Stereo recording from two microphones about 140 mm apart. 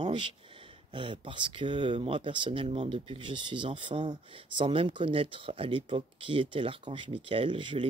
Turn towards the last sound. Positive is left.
turn(degrees=-35)  # may be behind; listen again after turning